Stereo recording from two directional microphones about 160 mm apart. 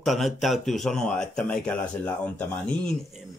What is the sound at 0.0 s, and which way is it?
Speech, centre (ahead or behind).